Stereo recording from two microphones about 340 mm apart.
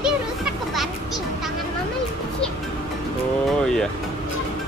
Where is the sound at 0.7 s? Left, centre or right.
Centre.